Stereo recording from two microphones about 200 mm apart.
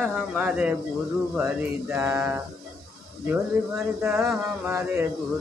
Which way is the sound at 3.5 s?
5° right (ahead or behind).